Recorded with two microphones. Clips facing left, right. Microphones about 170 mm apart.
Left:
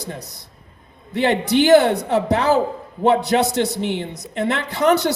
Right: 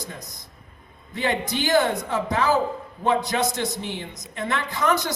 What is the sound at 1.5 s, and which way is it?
Speech, 70° left (ahead or behind).